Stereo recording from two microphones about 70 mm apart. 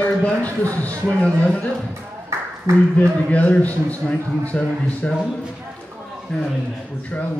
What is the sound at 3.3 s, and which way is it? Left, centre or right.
Speech, left.